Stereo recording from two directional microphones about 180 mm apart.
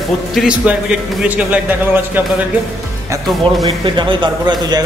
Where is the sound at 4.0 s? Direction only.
25° right (ahead or behind).